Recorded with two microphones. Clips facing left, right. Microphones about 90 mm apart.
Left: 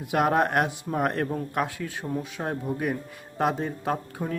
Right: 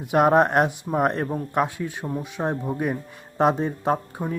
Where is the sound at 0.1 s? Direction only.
25° right (ahead or behind).